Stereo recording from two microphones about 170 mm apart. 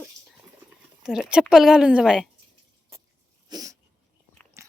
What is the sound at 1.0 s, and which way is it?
A woman's voice, 5° right (ahead or behind).